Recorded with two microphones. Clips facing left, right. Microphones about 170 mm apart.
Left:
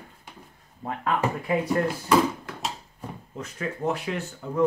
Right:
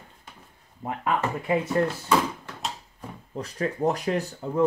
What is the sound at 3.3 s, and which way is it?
Speech, 35° right (ahead or behind).